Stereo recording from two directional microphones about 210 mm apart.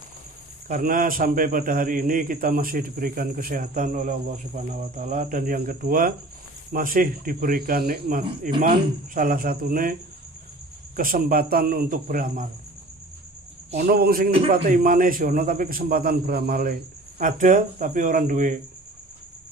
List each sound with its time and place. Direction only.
0.7 s a man's voice: 40° right (ahead or behind)
11.0 s a man's voice: 40° right (ahead or behind)
13.7 s a man's voice: 45° right (ahead or behind)